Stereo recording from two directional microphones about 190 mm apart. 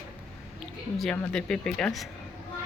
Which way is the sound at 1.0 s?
5° left (ahead or behind).